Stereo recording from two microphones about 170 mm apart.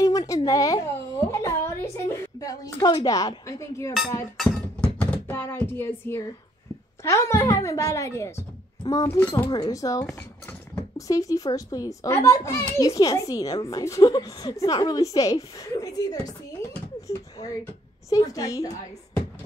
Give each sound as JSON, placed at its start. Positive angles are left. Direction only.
{"t": 0.0, "sound": "a child's voice", "side_deg": 20}
{"t": 1.3, "sound": "a sound", "side_deg": 15}
{"t": 3.1, "sound": "a woman's voice", "side_deg": 20}
{"t": 4.5, "sound": "thunk", "side_deg": 5}
{"t": 7.0, "sound": "a woman's voice", "side_deg": 15}
{"t": 8.8, "sound": "speech", "side_deg": 30}
{"t": 9.1, "sound": "a woman's voice", "side_deg": 15}